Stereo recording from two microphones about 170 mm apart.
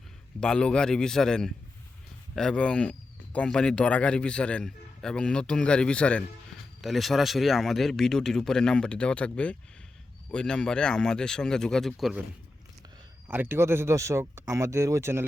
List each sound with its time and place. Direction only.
0.3 s a man's voice: 5° left (ahead or behind)
13.2 s speech: 10° right (ahead or behind)